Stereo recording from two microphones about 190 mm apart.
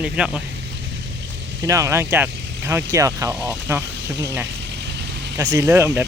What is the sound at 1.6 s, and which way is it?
Speech, 15° right (ahead or behind).